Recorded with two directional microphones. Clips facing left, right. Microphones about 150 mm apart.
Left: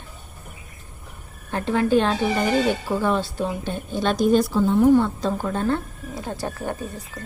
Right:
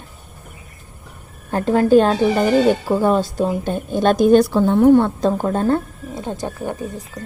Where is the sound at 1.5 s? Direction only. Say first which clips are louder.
Right 6 dB; 40° right (ahead or behind).